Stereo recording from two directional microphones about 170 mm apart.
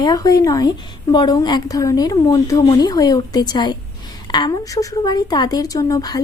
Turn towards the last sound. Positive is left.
turn(degrees=20)  # may be behind; listen again after turning